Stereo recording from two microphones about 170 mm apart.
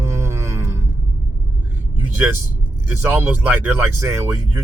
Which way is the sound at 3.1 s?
10° right (ahead or behind).